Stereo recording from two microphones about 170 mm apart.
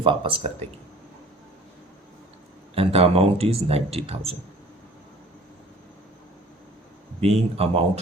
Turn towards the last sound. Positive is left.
turn(degrees=-35)  # may be behind; listen again after turning